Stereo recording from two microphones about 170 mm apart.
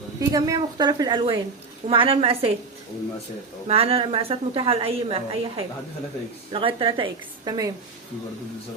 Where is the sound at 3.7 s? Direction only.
35° right (ahead or behind).